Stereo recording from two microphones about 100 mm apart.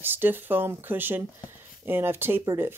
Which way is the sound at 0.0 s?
20° right (ahead or behind).